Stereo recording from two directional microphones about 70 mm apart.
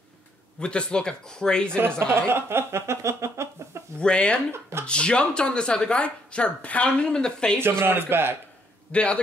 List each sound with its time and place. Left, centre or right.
0.6 s speech: centre
1.8 s speech: right
4.0 s speech: centre
4.5 s speech: right
4.8 s speech: centre
7.6 s speech: right
8.9 s speech: centre